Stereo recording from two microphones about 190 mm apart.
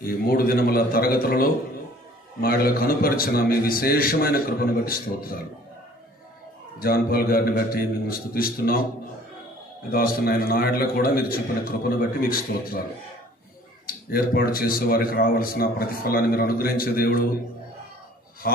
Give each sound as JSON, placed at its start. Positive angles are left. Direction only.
{"t": 0.0, "sound": "speech", "side_deg": 50}
{"t": 6.8, "sound": "speech", "side_deg": 50}
{"t": 9.8, "sound": "speech", "side_deg": 50}
{"t": 13.8, "sound": "speech", "side_deg": 50}
{"t": 18.4, "sound": "speech", "side_deg": 50}